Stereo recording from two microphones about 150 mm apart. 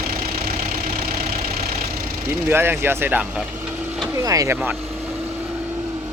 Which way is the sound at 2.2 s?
15° right (ahead or behind).